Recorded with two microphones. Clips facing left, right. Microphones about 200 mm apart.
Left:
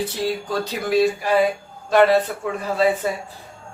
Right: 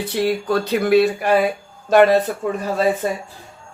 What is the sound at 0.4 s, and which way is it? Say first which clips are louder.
Speech: right 6 dB; 60° right (ahead or behind).